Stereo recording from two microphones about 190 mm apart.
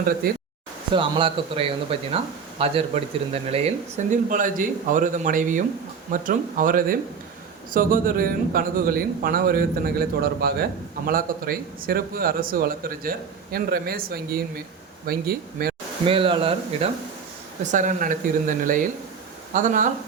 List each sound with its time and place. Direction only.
0.2 s a man's voice: 50° right (ahead or behind)
0.9 s a man's voice: 25° right (ahead or behind); by 15.7 s 50° right (ahead or behind)
16.0 s speech: 30° right (ahead or behind)
17.7 s a man's voice: 40° right (ahead or behind)